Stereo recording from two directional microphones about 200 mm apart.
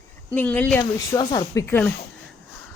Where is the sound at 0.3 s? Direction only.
10° left (ahead or behind).